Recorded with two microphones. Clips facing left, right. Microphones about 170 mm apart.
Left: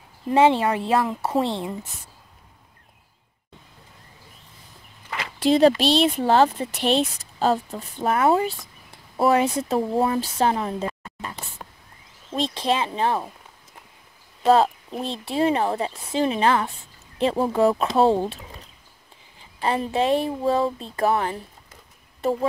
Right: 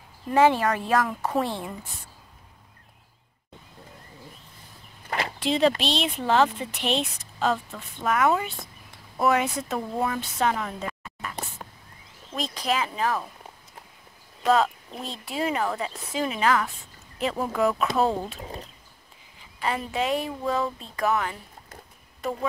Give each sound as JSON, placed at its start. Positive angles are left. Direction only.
{"t": 0.3, "sound": "speech", "side_deg": 25}
{"t": 5.4, "sound": "speech", "side_deg": 40}
{"t": 12.5, "sound": "speech", "side_deg": 25}
{"t": 14.4, "sound": "speech", "side_deg": 30}
{"t": 19.6, "sound": "speech", "side_deg": 30}